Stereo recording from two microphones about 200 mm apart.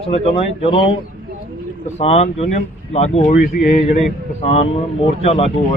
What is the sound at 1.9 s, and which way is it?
Speech, 30° left (ahead or behind).